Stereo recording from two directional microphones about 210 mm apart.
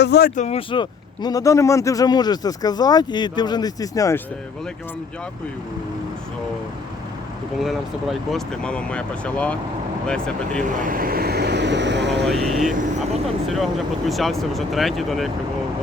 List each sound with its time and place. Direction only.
0.0 s speech: 50° left (ahead or behind); by 4.2 s 15° left (ahead or behind)
8.3 s speech: 5° left (ahead or behind)
10.6 s speech: 40° right (ahead or behind); by 12.3 s 55° right (ahead or behind)
12.3 s speech: centre (ahead or behind)
14.1 s speech: centre (ahead or behind)